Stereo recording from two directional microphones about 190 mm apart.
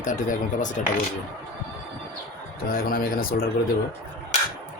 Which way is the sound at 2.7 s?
50° left (ahead or behind).